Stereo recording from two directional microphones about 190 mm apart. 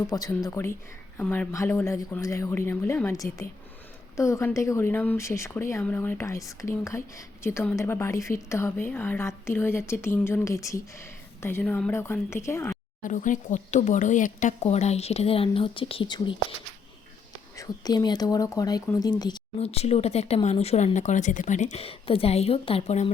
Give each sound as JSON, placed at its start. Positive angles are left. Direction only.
{"t": 0.1, "sound": "a woman's voice", "side_deg": 20}
{"t": 13.0, "sound": "speech", "side_deg": 40}
{"t": 17.6, "sound": "speech", "side_deg": 20}
{"t": 19.5, "sound": "speech", "side_deg": 35}